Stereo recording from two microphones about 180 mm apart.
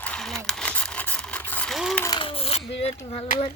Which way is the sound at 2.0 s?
25° left (ahead or behind).